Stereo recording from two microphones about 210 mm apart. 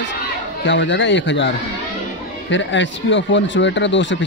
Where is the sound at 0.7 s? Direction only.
60° left (ahead or behind).